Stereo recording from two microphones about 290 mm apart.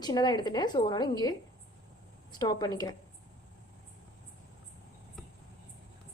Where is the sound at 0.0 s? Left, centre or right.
Centre.